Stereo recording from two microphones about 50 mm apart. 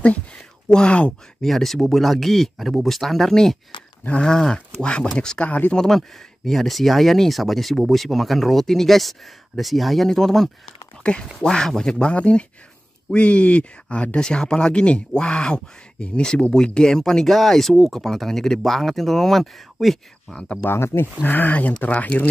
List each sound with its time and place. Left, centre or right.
0.7 s speech: centre
1.4 s speech: centre
4.1 s speech: centre
5.4 s speech: left
5.8 s speech: centre
11.0 s speech: centre
20.6 s speech: left
21.2 s speech: left